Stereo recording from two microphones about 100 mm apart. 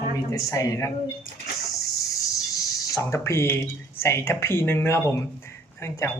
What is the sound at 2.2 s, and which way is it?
Speech, 35° left (ahead or behind).